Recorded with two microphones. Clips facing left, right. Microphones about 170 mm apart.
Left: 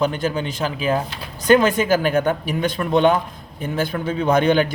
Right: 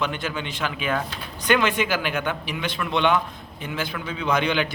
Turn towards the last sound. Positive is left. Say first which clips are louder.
# left 7 dB
turn(degrees=45)  # may be behind; listen again after turning